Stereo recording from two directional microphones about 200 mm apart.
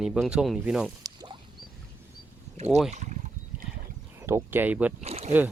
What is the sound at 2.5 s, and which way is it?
Speech, 35° right (ahead or behind).